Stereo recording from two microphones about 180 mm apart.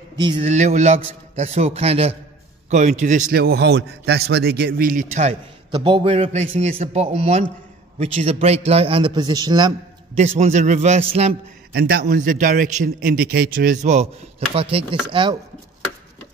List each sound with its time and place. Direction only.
0.2 s chopping: 25° right (ahead or behind)
0.5 s a man's voice: 40° right (ahead or behind)
5.7 s a man's voice: 25° right (ahead or behind)
10.1 s a man's voice: 35° right (ahead or behind)
11.7 s a man's voice: 55° right (ahead or behind)
14.5 s chopping: 30° right (ahead or behind)